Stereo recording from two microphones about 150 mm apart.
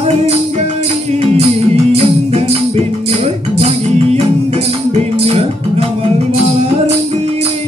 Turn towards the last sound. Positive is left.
turn(degrees=-45)  # may be behind; listen again after turning